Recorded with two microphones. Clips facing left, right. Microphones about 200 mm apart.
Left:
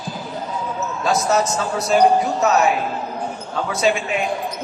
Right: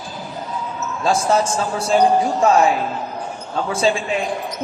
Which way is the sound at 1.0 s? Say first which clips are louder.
Right 1 dB; 30° right (ahead or behind).